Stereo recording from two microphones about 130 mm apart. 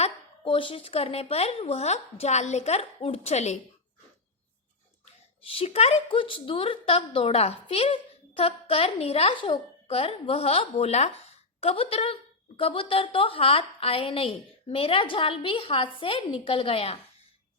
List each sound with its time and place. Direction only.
0.0 s a woman's voice: 40° left (ahead or behind); by 3.6 s 60° left (ahead or behind)
5.5 s a woman's voice: 50° left (ahead or behind)